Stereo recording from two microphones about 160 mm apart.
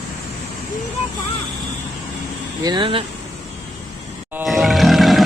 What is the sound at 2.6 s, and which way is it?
Speech, 30° right (ahead or behind).